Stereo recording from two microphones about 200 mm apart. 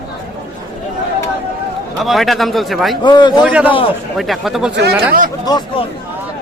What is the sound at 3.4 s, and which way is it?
Speech, 5° right (ahead or behind).